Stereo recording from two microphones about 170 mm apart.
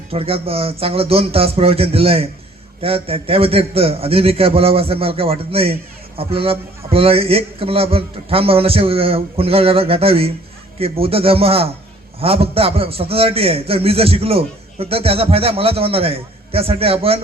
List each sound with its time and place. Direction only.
0.1 s a man's voice: 35° right (ahead or behind)